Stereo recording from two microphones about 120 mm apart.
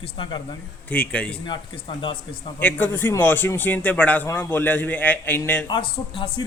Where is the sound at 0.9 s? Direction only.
10° left (ahead or behind).